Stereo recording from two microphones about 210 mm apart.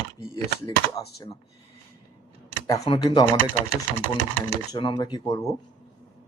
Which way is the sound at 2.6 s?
15° left (ahead or behind).